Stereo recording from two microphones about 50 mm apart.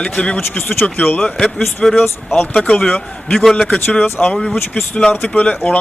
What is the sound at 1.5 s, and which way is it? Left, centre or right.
Speech, centre.